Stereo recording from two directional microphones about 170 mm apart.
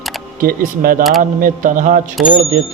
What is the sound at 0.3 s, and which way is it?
A man's voice, 55° right (ahead or behind).